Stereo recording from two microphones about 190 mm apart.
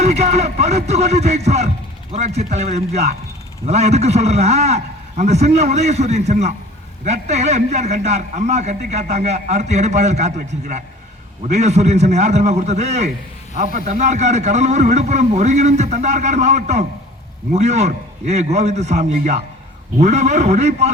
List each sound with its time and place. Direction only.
0.0 s music: 35° right (ahead or behind)
2.1 s a man's voice: 35° right (ahead or behind)